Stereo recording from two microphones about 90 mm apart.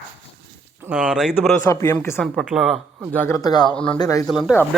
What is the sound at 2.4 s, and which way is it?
Speech, 5° right (ahead or behind).